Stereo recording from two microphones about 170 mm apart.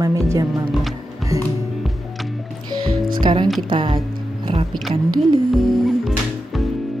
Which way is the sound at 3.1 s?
25° right (ahead or behind).